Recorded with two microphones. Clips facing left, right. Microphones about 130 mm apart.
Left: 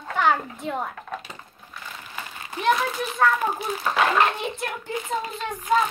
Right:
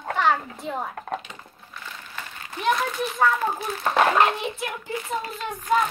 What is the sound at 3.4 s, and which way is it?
Speech, 15° left (ahead or behind).